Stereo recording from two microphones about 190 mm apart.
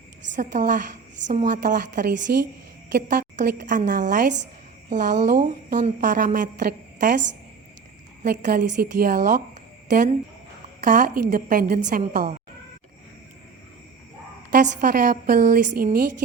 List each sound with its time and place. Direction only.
0.3 s a woman's voice: 40° right (ahead or behind)
2.3 s a woman's voice: 55° right (ahead or behind)
8.4 s a woman's voice: 40° right (ahead or behind)
14.6 s a woman's voice: 45° right (ahead or behind)